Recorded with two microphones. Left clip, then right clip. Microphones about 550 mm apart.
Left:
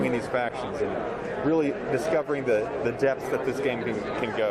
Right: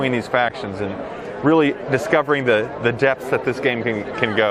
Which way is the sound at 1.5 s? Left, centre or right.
Right.